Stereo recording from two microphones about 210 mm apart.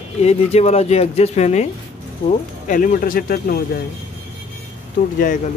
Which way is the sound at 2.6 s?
40° left (ahead or behind).